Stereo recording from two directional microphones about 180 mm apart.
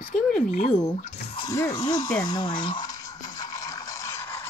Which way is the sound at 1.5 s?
15° left (ahead or behind).